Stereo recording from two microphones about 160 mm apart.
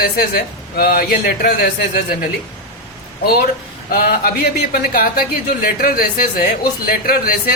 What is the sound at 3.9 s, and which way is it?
Speech, 70° left (ahead or behind).